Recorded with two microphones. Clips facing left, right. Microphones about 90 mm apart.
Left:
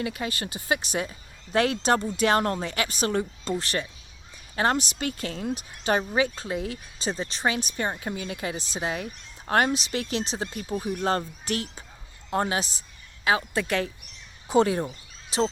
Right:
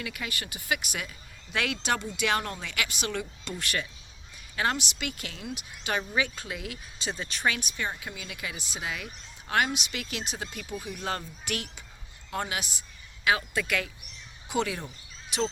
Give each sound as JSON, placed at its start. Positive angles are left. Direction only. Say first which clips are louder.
{"t": 0.0, "sound": "speech", "louder": "left 6 dB", "side_deg": 30}